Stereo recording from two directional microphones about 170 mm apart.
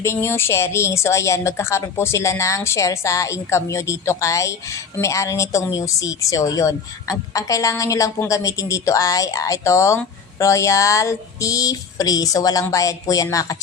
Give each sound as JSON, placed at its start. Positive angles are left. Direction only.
{"t": 0.0, "sound": "a woman's voice", "side_deg": 15}